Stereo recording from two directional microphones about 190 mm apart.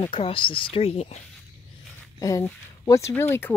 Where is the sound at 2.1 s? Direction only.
15° left (ahead or behind).